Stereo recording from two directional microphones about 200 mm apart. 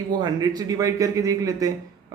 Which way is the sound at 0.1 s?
20° right (ahead or behind).